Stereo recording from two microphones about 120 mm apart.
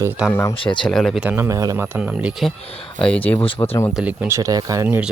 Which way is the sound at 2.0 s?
10° right (ahead or behind).